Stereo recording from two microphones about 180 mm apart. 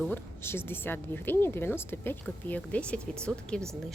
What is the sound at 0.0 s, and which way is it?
A woman's voice, 10° left (ahead or behind).